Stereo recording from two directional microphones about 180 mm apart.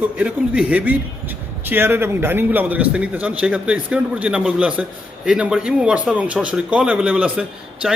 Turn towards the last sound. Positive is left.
turn(degrees=-5)  # may be behind; listen again after turning